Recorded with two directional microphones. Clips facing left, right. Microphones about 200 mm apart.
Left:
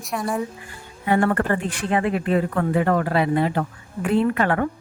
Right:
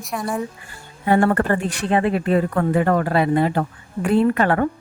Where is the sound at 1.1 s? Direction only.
35° right (ahead or behind).